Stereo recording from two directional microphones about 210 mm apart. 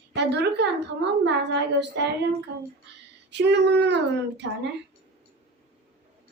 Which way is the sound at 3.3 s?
55° right (ahead or behind).